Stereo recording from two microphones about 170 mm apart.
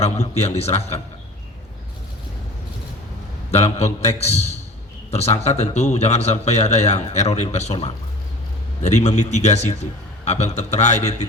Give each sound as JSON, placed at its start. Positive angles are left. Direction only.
{"t": 0.0, "sound": "a man's voice", "side_deg": 40}
{"t": 3.5, "sound": "a man's voice", "side_deg": 40}